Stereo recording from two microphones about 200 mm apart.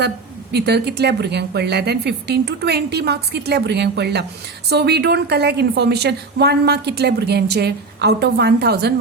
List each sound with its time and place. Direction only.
0.5 s a woman's voice: 55° right (ahead or behind)